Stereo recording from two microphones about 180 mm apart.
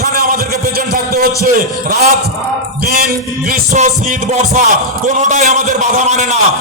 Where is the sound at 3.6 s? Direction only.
40° right (ahead or behind).